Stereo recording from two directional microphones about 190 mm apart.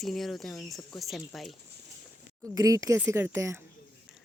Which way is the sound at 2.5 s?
20° right (ahead or behind).